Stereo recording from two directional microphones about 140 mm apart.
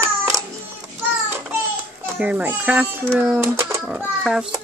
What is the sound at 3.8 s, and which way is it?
Speech, 5° right (ahead or behind).